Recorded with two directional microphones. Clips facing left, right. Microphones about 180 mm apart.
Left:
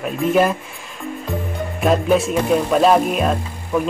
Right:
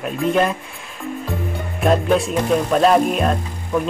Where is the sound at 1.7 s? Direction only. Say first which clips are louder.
Even; centre (ahead or behind).